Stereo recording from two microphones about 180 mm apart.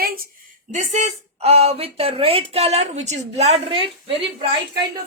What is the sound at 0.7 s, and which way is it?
Speech, 40° right (ahead or behind).